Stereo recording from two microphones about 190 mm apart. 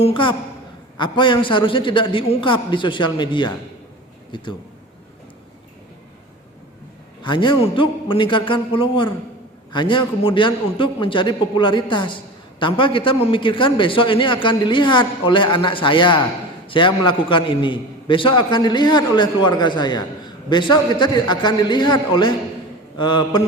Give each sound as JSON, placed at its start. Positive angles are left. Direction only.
{"t": 0.0, "sound": "a man's voice", "side_deg": 25}
{"t": 7.2, "sound": "a man's voice", "side_deg": 25}